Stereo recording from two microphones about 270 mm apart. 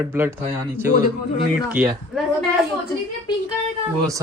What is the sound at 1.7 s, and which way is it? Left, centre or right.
Speech, centre.